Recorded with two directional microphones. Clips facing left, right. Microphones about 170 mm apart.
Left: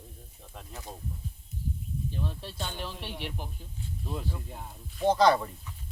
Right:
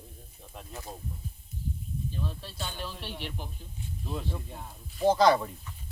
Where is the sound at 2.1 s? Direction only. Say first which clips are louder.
Left 1 dB; 20° left (ahead or behind).